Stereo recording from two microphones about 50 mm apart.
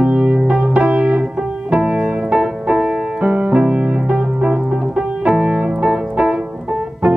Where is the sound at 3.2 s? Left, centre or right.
Right.